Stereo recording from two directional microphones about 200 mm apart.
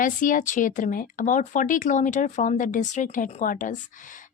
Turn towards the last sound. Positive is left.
turn(degrees=40)  # may be behind; listen again after turning